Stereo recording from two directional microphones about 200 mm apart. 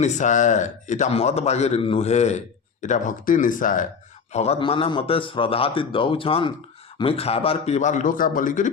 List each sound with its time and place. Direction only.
0.0 s a man's voice: 35° left (ahead or behind)